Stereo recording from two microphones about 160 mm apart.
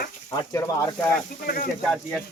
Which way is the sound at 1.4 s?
65° left (ahead or behind).